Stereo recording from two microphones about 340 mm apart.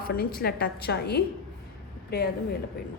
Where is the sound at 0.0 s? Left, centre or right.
Left.